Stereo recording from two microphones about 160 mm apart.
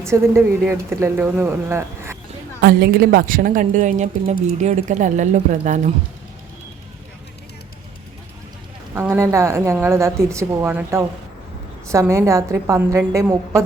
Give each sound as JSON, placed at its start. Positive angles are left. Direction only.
{"t": 0.0, "sound": "speech", "side_deg": -15}
{"t": 2.6, "sound": "a woman's voice", "side_deg": -70}
{"t": 9.0, "sound": "a woman's voice", "side_deg": -15}